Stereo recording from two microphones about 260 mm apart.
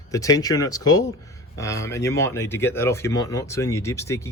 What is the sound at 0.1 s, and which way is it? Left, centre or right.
Speech, centre.